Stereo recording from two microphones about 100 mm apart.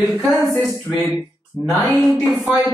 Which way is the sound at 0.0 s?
Centre (ahead or behind).